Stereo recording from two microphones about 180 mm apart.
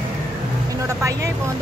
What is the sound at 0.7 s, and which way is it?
Vehicle, 15° right (ahead or behind).